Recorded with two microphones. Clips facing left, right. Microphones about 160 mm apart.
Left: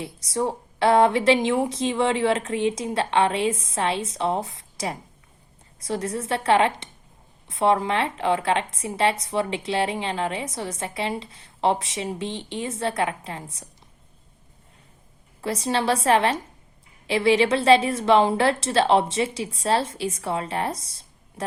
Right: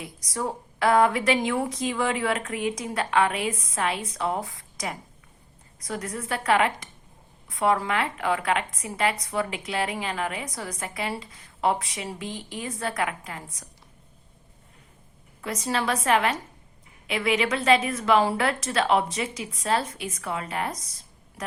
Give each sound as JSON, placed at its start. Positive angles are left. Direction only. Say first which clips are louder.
{"t": 0.0, "sound": "a woman's voice", "louder": "left 5 dB", "side_deg": 25}
{"t": 15.4, "sound": "a woman's voice", "louder": "left 3 dB", "side_deg": 30}